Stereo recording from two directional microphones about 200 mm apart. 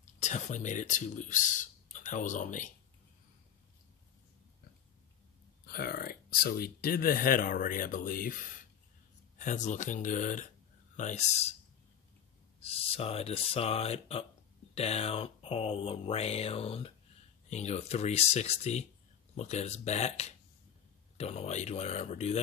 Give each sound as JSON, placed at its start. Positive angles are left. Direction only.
{"t": 0.0, "sound": "speech", "side_deg": 35}
{"t": 5.7, "sound": "speech", "side_deg": 50}
{"t": 12.5, "sound": "speech", "side_deg": 30}